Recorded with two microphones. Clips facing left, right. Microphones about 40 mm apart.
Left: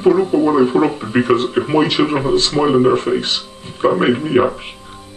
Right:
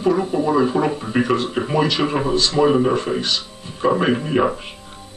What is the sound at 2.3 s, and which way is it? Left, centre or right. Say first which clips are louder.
Speech: left 4 dB; left.